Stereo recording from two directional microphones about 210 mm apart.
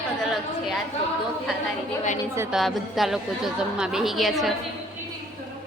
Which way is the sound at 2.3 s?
Centre (ahead or behind).